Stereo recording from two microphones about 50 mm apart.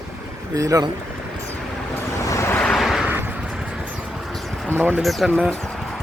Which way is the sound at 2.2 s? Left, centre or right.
Left.